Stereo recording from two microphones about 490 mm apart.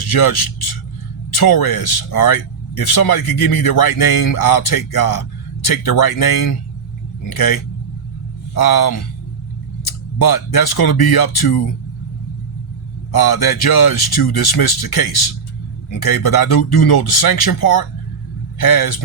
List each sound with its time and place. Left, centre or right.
0.1 s speech: left
10.2 s speech: left
13.1 s speech: left